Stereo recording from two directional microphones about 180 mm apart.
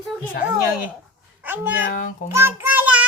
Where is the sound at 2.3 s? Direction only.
15° right (ahead or behind).